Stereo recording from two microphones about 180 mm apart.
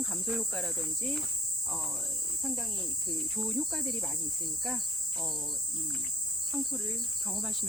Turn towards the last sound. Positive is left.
turn(degrees=0)  # may be behind; listen again after turning